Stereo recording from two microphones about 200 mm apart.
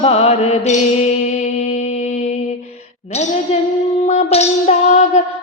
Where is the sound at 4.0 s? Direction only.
30° left (ahead or behind).